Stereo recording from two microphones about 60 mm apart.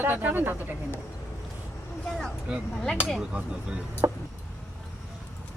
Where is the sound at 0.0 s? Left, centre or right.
Right.